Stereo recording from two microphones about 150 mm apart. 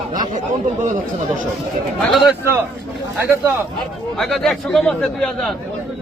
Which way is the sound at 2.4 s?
15° right (ahead or behind).